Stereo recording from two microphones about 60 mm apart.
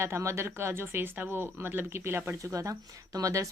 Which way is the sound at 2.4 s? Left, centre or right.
Right.